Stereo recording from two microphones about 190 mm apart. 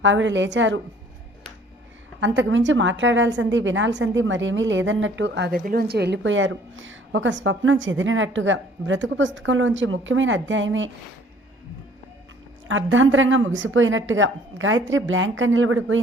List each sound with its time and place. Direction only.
0.0 s a woman's voice: 75° right (ahead or behind)
2.2 s a woman's voice: 75° right (ahead or behind)
12.6 s a woman's voice: 90° right